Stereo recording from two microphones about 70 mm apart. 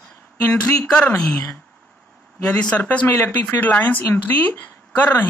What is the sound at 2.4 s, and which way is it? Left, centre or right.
Speech, centre.